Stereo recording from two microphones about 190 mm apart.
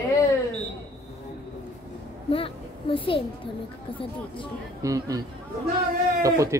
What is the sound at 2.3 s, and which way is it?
A child's voice, 30° left (ahead or behind).